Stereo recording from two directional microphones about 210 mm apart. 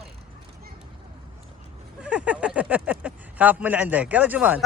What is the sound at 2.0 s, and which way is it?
Speech, 5° right (ahead or behind).